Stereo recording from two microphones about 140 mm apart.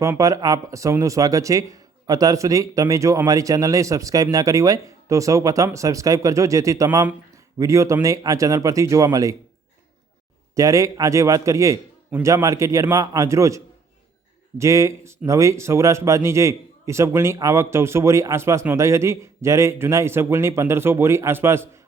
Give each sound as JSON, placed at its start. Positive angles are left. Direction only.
{"t": 0.2, "sound": "speech", "side_deg": -25}
{"t": 10.5, "sound": "speech", "side_deg": -25}
{"t": 14.6, "sound": "speech", "side_deg": -20}